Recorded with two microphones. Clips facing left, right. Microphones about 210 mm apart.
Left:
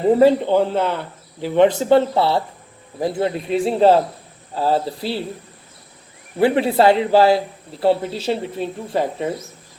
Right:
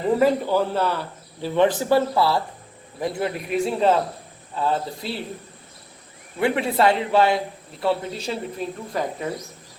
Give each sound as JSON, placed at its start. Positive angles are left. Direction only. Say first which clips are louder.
{"t": 0.0, "sound": "a man's voice", "louder": "left 6 dB", "side_deg": 30}
{"t": 6.4, "sound": "a man's voice", "louder": "left 5 dB", "side_deg": 30}